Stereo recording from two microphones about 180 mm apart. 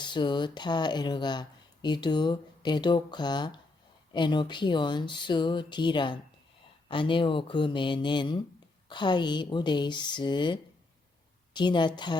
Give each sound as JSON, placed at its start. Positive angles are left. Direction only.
{"t": 0.0, "sound": "speech", "side_deg": 25}